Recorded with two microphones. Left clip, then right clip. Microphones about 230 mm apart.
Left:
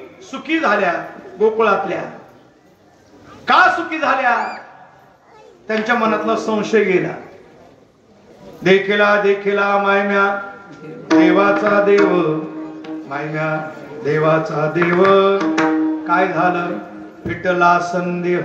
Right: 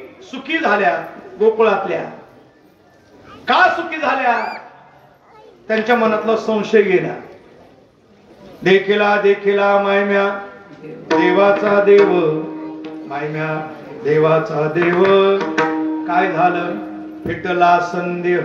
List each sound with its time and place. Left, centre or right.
0.2 s a man's voice: left
3.4 s speech: left
5.7 s speech: left
8.6 s speech: left
12.8 s music: left
14.0 s speech: left